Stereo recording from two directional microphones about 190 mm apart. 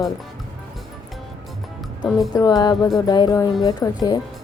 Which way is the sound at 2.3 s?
20° left (ahead or behind).